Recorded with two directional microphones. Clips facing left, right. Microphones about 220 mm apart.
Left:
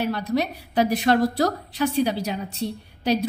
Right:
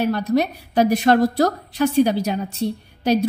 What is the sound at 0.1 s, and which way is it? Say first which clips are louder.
A woman's voice: right 5 dB; 45° right (ahead or behind).